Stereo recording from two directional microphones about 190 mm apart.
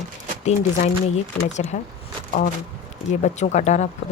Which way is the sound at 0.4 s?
35° left (ahead or behind).